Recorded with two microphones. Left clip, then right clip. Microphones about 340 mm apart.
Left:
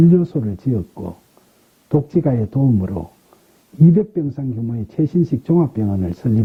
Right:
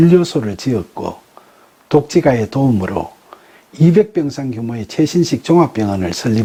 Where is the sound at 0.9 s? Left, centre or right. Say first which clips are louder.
Right 8 dB; centre.